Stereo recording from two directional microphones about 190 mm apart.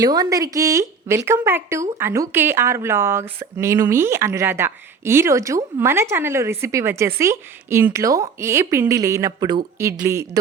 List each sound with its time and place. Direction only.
0.0 s speech: 20° right (ahead or behind)